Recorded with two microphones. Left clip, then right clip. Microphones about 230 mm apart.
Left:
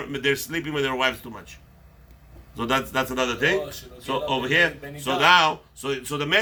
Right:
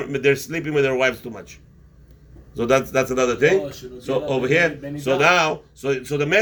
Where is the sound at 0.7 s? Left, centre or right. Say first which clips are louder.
Right 5 dB; left.